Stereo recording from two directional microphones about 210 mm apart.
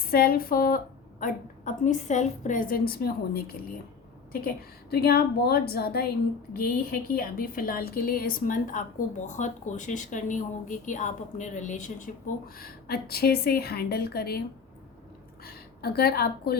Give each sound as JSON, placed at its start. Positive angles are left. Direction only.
{"t": 0.1, "sound": "a woman's voice", "side_deg": 45}
{"t": 12.5, "sound": "a woman's voice", "side_deg": 45}
{"t": 15.4, "sound": "a woman's voice", "side_deg": 50}